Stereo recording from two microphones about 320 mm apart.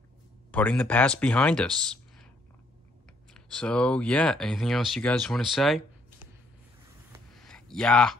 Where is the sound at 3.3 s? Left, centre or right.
Centre.